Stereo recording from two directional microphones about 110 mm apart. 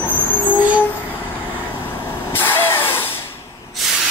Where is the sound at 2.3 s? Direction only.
20° left (ahead or behind).